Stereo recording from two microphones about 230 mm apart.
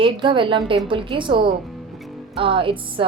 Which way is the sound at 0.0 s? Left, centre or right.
Right.